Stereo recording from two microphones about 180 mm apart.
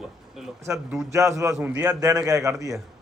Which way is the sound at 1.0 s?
15° right (ahead or behind).